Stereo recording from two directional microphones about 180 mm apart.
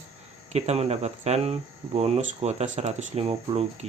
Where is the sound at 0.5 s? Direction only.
35° right (ahead or behind).